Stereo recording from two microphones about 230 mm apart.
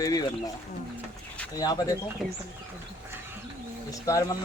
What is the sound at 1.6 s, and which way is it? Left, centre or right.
Speech, centre.